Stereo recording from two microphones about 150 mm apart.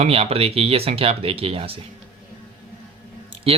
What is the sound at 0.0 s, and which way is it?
A man's voice, 40° right (ahead or behind).